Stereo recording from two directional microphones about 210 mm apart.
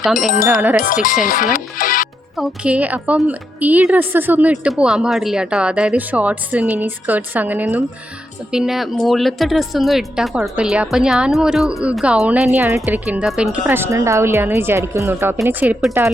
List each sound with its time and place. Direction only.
0.0 s a woman's voice: centre (ahead or behind)
1.0 s speech: 40° left (ahead or behind)
2.3 s a woman's voice: 5° right (ahead or behind)